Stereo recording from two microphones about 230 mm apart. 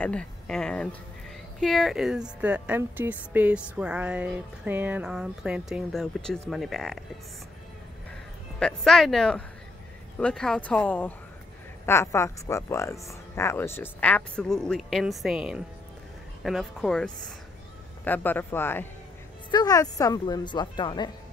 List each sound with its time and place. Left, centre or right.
0.0 s a woman's voice: centre
8.5 s a woman's voice: centre